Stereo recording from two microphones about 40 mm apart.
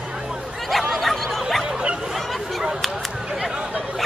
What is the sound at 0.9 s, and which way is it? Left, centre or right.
Snicker, centre.